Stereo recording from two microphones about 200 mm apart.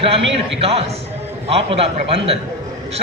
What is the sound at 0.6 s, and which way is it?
A man's voice, 30° right (ahead or behind).